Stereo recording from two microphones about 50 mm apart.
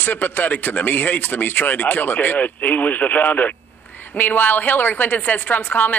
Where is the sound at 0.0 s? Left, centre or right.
Left.